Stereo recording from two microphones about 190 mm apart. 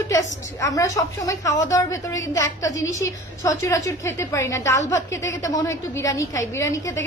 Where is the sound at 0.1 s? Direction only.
15° left (ahead or behind).